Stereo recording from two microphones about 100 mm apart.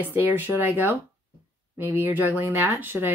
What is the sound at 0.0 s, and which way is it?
Speech, 20° right (ahead or behind).